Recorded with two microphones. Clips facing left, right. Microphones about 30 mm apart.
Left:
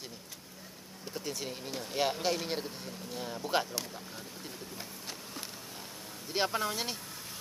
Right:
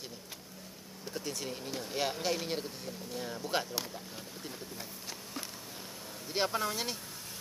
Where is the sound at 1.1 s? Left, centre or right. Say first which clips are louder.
Even; centre.